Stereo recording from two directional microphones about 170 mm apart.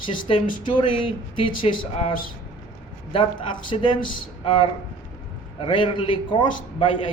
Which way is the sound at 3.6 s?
30° left (ahead or behind).